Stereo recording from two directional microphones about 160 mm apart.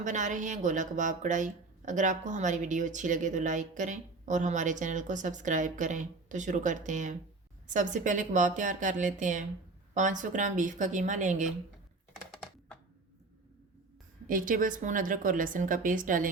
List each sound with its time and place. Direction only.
0.0 s a woman's voice: 50° right (ahead or behind)
14.3 s a woman's voice: 60° right (ahead or behind)